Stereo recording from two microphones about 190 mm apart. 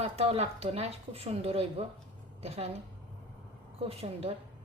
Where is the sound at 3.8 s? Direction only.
30° right (ahead or behind).